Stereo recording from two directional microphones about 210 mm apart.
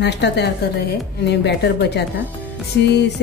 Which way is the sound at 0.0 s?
55° left (ahead or behind).